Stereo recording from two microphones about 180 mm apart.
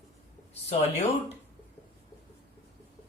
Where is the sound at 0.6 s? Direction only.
35° left (ahead or behind).